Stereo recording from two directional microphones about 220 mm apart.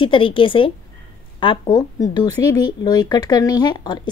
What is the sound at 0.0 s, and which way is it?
A woman's voice, 25° left (ahead or behind).